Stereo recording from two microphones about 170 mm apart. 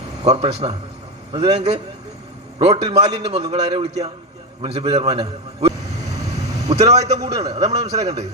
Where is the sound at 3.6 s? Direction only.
25° right (ahead or behind).